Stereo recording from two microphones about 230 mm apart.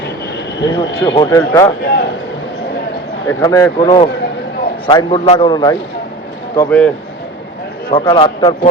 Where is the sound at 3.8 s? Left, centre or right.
Left.